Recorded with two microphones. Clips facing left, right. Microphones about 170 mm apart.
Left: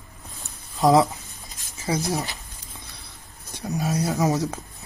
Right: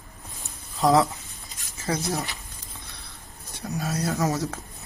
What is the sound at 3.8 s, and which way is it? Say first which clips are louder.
Speech: left 3 dB; 10° left (ahead or behind).